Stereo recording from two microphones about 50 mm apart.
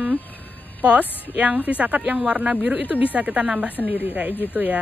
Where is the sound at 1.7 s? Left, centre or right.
Right.